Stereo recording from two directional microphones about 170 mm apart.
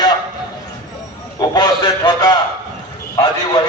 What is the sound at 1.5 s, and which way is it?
A man's voice, 25° left (ahead or behind).